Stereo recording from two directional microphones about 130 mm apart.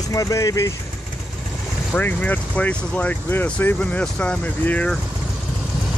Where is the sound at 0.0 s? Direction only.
25° left (ahead or behind).